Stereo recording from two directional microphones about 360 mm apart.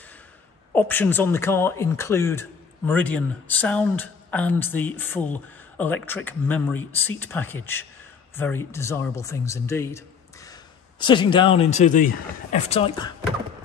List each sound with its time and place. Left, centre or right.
0.7 s speech: centre